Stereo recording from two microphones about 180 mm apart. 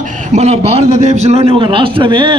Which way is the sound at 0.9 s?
45° left (ahead or behind).